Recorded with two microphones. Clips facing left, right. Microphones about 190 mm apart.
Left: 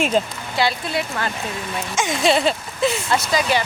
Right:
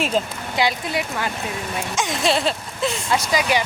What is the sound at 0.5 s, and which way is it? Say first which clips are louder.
Speech: left 1 dB; 15° right (ahead or behind).